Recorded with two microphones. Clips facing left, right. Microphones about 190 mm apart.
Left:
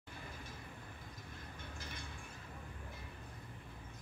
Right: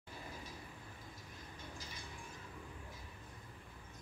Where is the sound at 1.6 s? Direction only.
60° left (ahead or behind).